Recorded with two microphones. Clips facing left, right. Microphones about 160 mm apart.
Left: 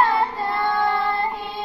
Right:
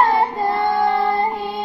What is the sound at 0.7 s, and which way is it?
Child singing, 40° right (ahead or behind).